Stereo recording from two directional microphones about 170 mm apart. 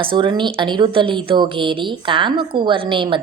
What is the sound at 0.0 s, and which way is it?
A woman's voice, 30° right (ahead or behind).